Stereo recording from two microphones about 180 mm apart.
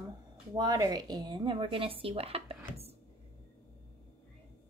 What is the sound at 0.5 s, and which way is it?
Speech, 20° right (ahead or behind).